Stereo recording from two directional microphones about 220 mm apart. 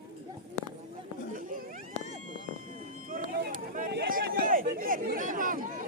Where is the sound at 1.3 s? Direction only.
40° right (ahead or behind).